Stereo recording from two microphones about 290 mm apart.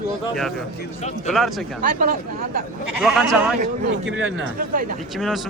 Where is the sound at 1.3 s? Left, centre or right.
Centre.